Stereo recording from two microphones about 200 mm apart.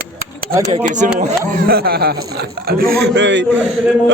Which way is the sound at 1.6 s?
50° right (ahead or behind).